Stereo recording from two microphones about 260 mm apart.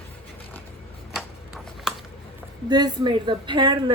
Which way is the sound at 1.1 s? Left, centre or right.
Centre.